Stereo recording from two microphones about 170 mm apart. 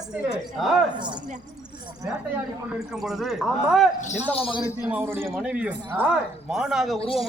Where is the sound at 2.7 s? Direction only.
Centre (ahead or behind).